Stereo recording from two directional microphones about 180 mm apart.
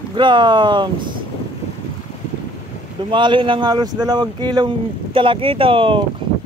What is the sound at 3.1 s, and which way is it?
Speech, 25° right (ahead or behind).